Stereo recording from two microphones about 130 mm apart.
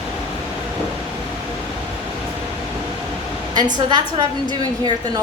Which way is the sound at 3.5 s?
35° right (ahead or behind).